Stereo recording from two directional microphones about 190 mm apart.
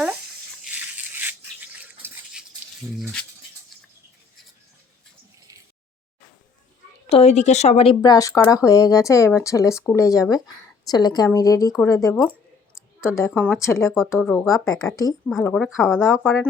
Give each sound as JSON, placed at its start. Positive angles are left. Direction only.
{"t": 0.7, "sound": "a sound", "side_deg": -10}
{"t": 3.0, "sound": "speech", "side_deg": 5}
{"t": 7.1, "sound": "a woman's voice", "side_deg": 35}
{"t": 14.2, "sound": "speech", "side_deg": 5}
{"t": 14.4, "sound": "a woman's voice", "side_deg": 15}
{"t": 15.4, "sound": "speech", "side_deg": 0}
{"t": 16.2, "sound": "a woman's voice", "side_deg": 10}